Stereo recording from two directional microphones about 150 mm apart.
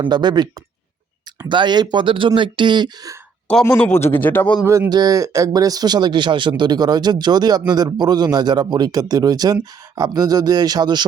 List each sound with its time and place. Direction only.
0.0 s speech: 30° right (ahead or behind)
1.5 s speech: 30° right (ahead or behind)
3.6 s a man's voice: 15° left (ahead or behind)
4.6 s speech: 15° right (ahead or behind)